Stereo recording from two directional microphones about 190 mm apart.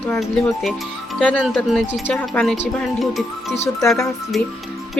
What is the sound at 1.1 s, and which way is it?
Speech, 5° left (ahead or behind).